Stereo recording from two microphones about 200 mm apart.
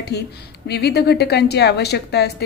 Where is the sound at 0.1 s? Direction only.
55° left (ahead or behind).